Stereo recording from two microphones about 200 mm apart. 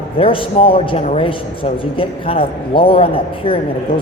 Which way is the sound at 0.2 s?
25° left (ahead or behind).